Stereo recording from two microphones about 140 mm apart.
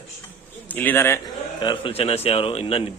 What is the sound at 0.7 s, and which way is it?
Speech, 15° left (ahead or behind).